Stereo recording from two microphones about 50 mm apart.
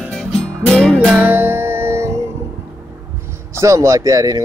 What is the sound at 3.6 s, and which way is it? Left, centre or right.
Speech, right.